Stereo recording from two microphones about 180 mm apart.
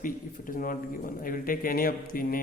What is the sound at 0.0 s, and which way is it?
A man's voice, 50° left (ahead or behind).